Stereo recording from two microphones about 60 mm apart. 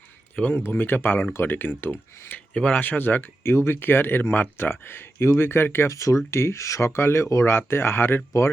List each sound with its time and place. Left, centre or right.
0.4 s speech: centre
0.7 s speech: left
2.5 s speech: centre
2.8 s speech: left
5.9 s speech: left